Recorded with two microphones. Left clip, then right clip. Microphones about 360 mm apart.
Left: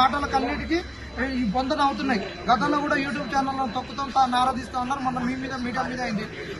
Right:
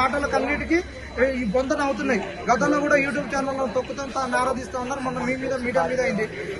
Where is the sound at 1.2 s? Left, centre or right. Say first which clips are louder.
Right 5 dB; centre.